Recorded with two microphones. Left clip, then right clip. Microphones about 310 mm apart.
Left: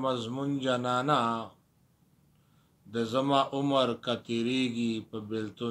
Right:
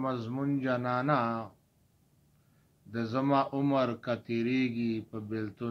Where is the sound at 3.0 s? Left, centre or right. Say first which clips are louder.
Left 2 dB; centre.